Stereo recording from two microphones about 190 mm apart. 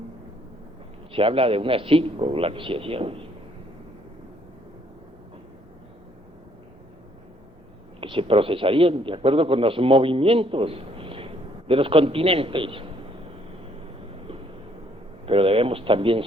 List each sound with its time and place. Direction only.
1.1 s a man's voice: 30° right (ahead or behind)
8.0 s a man's voice: 30° right (ahead or behind)
15.3 s a man's voice: 30° right (ahead or behind)